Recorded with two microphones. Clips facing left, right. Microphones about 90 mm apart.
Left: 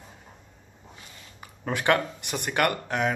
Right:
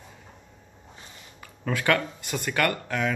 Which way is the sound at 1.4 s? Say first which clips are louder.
Even; 20° left (ahead or behind).